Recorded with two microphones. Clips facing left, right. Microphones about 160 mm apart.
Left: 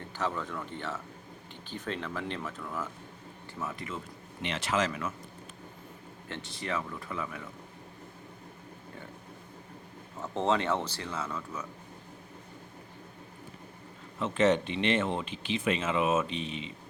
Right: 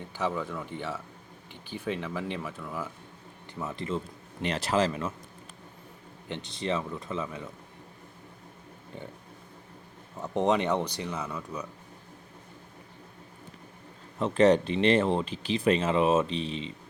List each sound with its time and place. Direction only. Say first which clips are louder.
0.2 s speech: right 3 dB; 10° right (ahead or behind)
3.6 s speech: right 5 dB; 30° right (ahead or behind)
6.2 s speech: right 5 dB; 20° right (ahead or behind)
10.2 s speech: right 3 dB; 15° right (ahead or behind)
14.2 s speech: right 4 dB; 35° right (ahead or behind)